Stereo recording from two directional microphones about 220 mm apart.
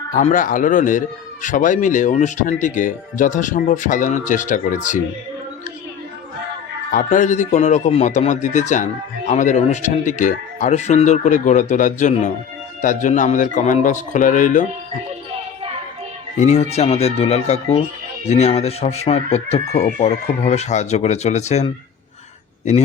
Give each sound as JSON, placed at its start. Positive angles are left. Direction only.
{"t": 0.1, "sound": "speech", "side_deg": 35}
{"t": 6.9, "sound": "speech", "side_deg": 35}
{"t": 16.4, "sound": "speech", "side_deg": 30}